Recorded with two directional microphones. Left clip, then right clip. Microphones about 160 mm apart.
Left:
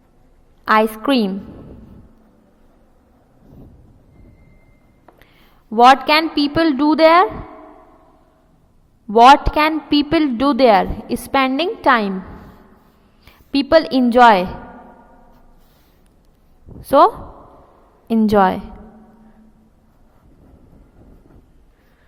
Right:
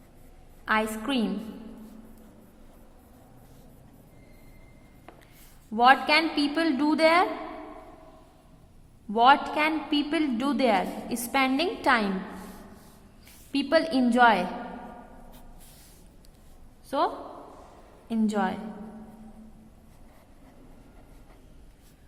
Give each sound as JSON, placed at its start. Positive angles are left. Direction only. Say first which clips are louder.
{"t": 0.6, "sound": "a woman's voice", "louder": "left 12 dB", "side_deg": 50}
{"t": 5.7, "sound": "a woman's voice", "louder": "left 9 dB", "side_deg": 50}
{"t": 9.1, "sound": "a woman's voice", "louder": "left 11 dB", "side_deg": 50}
{"t": 13.5, "sound": "a woman's voice", "louder": "left 10 dB", "side_deg": 45}
{"t": 17.0, "sound": "a woman's voice", "louder": "left 15 dB", "side_deg": 65}
{"t": 18.3, "sound": "a woman's voice", "louder": "left 16 dB", "side_deg": 60}